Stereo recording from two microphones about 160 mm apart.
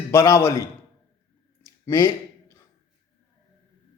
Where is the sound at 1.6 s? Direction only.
15° left (ahead or behind).